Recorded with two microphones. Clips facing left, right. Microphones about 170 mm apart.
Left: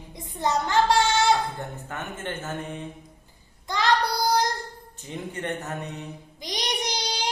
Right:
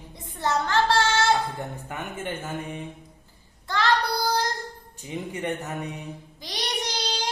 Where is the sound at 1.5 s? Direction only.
10° right (ahead or behind).